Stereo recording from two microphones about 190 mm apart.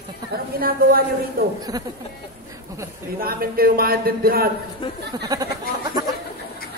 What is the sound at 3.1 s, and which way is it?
Speech, 50° right (ahead or behind).